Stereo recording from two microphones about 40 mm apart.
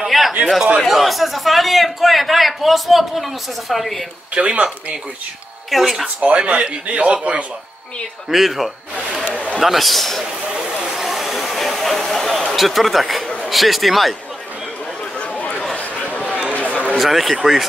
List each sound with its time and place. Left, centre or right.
0.1 s a sound: centre
0.8 s a man's voice: centre
4.3 s a man's voice: right
5.7 s a man's voice: centre
6.2 s a man's voice: right
8.3 s a man's voice: centre
10.9 s a sound: centre
11.4 s a man's voice: centre
15.1 s chatter: left
15.7 s a sound: left
16.9 s a man's voice: centre